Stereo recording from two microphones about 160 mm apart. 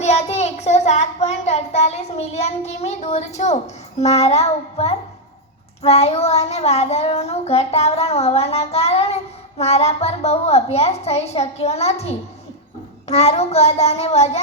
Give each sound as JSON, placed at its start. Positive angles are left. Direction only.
{"t": 0.0, "sound": "child singing", "side_deg": 45}